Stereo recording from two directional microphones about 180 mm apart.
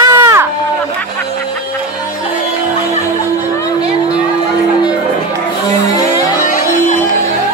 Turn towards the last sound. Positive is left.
turn(degrees=45)  # may be behind; listen again after turning